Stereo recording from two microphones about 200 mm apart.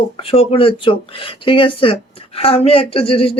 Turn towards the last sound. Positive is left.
turn(degrees=30)  # may be behind; listen again after turning